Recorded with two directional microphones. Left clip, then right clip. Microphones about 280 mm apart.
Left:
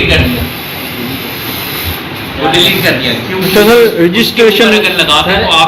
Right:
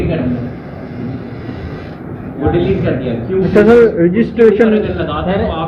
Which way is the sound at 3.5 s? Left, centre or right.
Centre.